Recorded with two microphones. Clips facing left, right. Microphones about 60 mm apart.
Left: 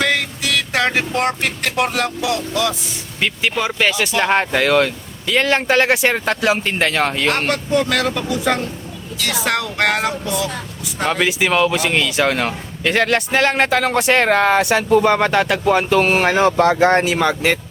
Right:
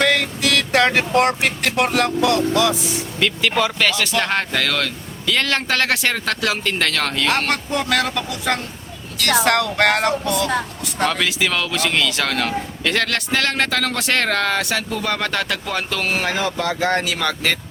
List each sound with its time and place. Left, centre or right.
0.0 s speech: centre
3.2 s speech: centre
7.3 s a sound: centre
11.1 s speech: centre